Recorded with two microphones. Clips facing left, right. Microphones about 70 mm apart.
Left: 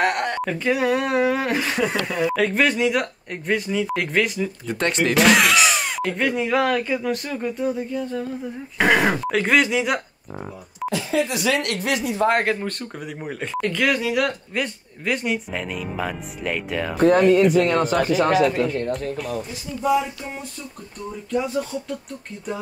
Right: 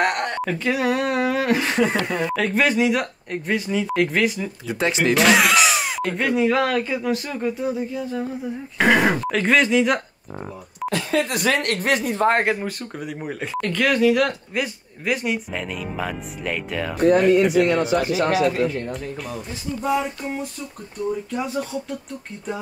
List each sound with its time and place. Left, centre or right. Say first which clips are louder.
0.0 s speech: even; centre
10.9 s speech: even; right
12.5 s speech: even; centre
17.9 s speech: left 1 dB; left
19.8 s music: left 2 dB; right
21.3 s speech: left 2 dB; centre